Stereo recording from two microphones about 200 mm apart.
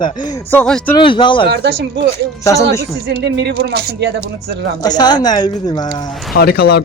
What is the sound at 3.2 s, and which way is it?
Speech, 60° right (ahead or behind).